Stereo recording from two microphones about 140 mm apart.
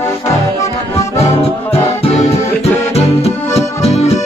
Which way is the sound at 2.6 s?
50° left (ahead or behind).